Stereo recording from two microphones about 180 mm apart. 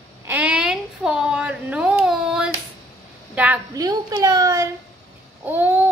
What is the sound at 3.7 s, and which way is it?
Speech, 20° right (ahead or behind).